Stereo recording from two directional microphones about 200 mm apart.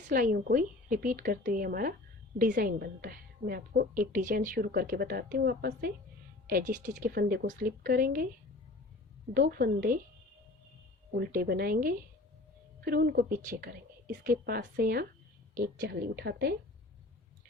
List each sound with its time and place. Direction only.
0.1 s a woman's voice: 45° right (ahead or behind)
9.3 s a woman's voice: 50° right (ahead or behind)
11.2 s a woman's voice: 50° right (ahead or behind)